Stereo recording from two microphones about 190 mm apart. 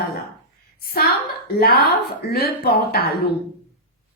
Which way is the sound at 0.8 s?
55° left (ahead or behind).